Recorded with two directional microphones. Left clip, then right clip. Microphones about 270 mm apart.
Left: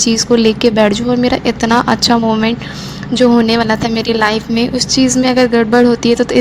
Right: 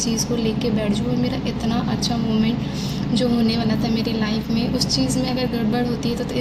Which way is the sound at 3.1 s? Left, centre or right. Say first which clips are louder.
Left 11 dB; left.